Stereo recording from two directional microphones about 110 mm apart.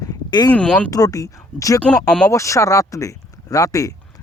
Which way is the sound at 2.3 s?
30° left (ahead or behind).